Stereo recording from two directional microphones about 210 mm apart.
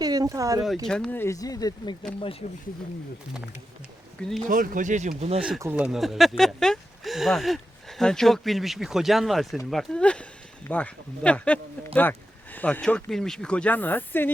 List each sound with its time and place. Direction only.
0.0 s speech: 15° right (ahead or behind)
0.9 s speech: 5° left (ahead or behind); by 2.0 s 20° left (ahead or behind)
4.2 s speech: centre (ahead or behind)
4.4 s speech: 40° right (ahead or behind)
5.4 s speech: 10° right (ahead or behind); by 14.3 s 10° left (ahead or behind)